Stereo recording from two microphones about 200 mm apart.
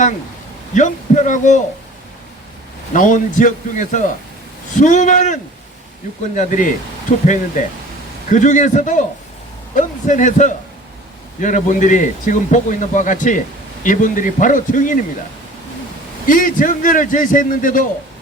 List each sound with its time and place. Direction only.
0.7 s a man's voice: 40° left (ahead or behind)
2.9 s a man's voice: 40° left (ahead or behind)
8.3 s a man's voice: 35° left (ahead or behind)
16.2 s a man's voice: 40° left (ahead or behind)